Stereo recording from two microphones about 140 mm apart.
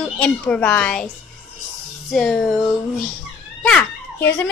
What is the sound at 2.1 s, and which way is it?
Speech, centre (ahead or behind).